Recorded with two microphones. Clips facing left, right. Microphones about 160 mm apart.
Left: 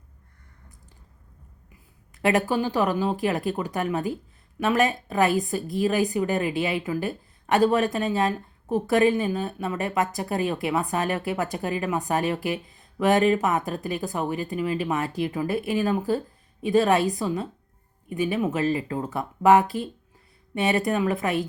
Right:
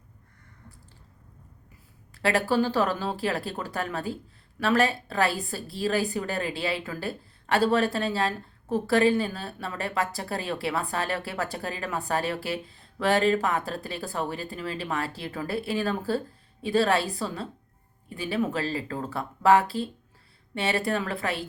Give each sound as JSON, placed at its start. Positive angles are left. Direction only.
{"t": 2.1, "sound": "a woman's voice", "side_deg": 20}